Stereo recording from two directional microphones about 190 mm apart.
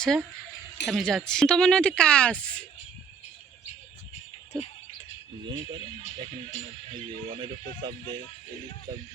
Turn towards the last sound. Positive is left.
turn(degrees=-25)  # may be behind; listen again after turning